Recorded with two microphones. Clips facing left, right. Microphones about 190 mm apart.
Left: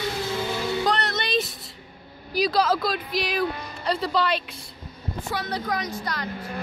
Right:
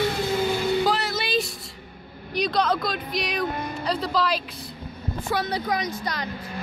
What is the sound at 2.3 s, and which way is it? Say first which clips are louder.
Speech: left 1 dB; 5° left (ahead or behind).